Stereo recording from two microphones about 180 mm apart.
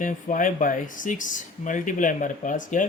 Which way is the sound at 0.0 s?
45° left (ahead or behind).